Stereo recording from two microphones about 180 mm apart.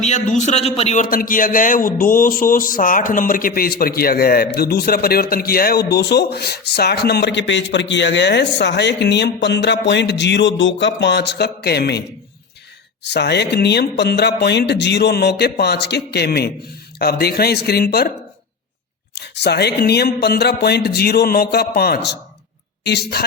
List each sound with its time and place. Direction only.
0.0 s a man's voice: 40° left (ahead or behind)
1.1 s speech: 50° left (ahead or behind)
13.1 s speech: 70° left (ahead or behind)
19.1 s speech: 70° left (ahead or behind)